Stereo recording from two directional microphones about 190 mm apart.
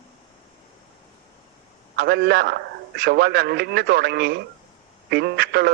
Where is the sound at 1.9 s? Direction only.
60° right (ahead or behind).